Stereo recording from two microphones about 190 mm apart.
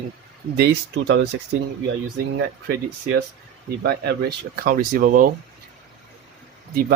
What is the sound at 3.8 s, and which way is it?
Speech, 60° right (ahead or behind).